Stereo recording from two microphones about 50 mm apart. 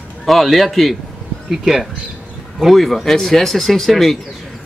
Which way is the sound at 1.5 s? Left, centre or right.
Centre.